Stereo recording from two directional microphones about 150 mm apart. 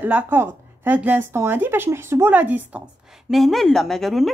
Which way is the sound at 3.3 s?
Centre (ahead or behind).